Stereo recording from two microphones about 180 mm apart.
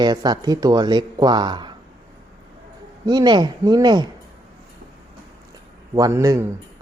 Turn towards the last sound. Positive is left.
turn(degrees=-20)  # may be behind; listen again after turning